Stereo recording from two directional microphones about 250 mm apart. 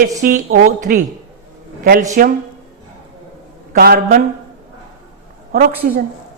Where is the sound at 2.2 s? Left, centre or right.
Right.